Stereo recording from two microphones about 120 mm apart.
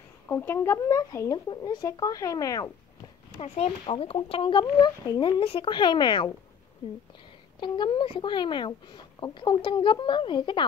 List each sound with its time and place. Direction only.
0.3 s speech: 20° left (ahead or behind)
3.4 s speech: 60° left (ahead or behind); by 5.3 s 35° left (ahead or behind)
5.4 s speech: 45° left (ahead or behind)
7.6 s speech: 40° left (ahead or behind)